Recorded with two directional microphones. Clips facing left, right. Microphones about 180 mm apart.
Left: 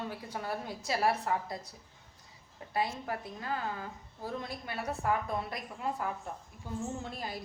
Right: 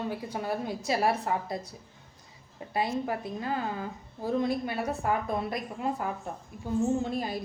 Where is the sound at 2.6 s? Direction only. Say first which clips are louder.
Right 6 dB; 20° right (ahead or behind).